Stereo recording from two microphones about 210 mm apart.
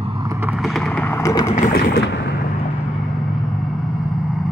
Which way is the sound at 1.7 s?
50° left (ahead or behind).